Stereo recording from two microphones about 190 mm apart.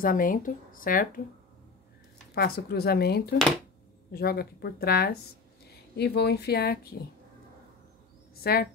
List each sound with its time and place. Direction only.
0.0 s speech: 45° left (ahead or behind)
2.3 s speech: 55° left (ahead or behind)
8.4 s speech: 55° left (ahead or behind)